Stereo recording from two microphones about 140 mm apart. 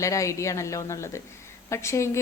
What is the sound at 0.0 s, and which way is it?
A woman's voice, 20° left (ahead or behind).